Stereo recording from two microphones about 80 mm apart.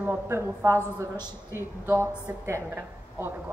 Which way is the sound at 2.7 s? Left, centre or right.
Right.